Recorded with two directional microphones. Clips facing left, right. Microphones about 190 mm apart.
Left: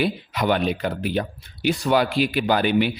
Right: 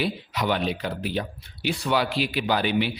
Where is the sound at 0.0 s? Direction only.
50° left (ahead or behind).